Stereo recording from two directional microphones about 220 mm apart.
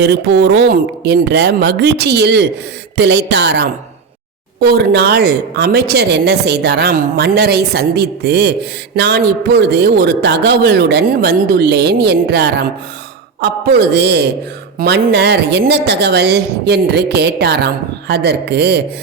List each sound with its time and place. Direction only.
0.0 s a woman's voice: 50° right (ahead or behind)